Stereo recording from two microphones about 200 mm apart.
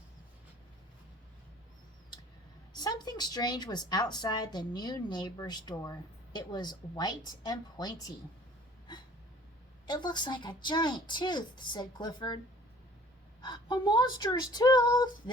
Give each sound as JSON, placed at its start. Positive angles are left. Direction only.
{"t": 2.7, "sound": "a woman's voice", "side_deg": 20}
{"t": 9.8, "sound": "a woman's voice", "side_deg": 20}
{"t": 13.4, "sound": "a woman's voice", "side_deg": 20}